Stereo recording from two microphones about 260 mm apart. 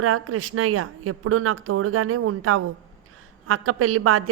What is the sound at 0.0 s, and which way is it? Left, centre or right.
A woman's voice, right.